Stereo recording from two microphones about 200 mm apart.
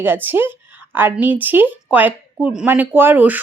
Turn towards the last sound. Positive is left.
turn(degrees=-10)  # may be behind; listen again after turning